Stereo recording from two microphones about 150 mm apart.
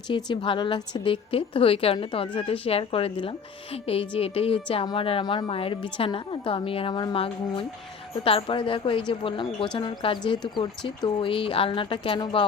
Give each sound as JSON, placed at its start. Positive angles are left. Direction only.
{"t": 0.3, "sound": "a woman's voice", "side_deg": 30}